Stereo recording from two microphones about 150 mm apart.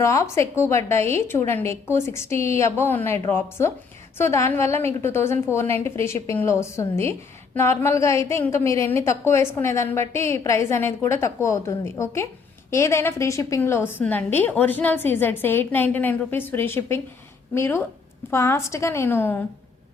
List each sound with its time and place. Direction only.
0.0 s a woman's voice: 20° left (ahead or behind)